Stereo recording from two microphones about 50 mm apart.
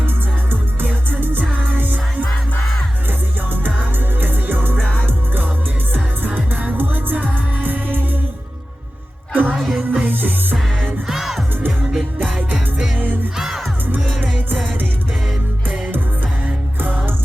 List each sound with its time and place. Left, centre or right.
0.9 s music: right
3.5 s music: right
4.8 s music: centre
5.0 s music: right
9.3 s music: right
9.6 s music: centre
9.9 s music: right
11.1 s music: centre
13.3 s music: centre